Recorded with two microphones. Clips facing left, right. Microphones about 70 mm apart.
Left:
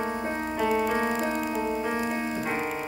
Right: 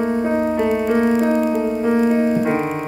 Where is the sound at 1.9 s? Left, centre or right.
Centre.